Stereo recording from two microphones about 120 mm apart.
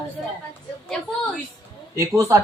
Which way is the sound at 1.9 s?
25° right (ahead or behind).